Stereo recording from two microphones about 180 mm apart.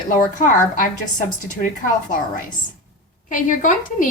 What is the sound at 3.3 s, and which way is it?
Speech, 45° left (ahead or behind).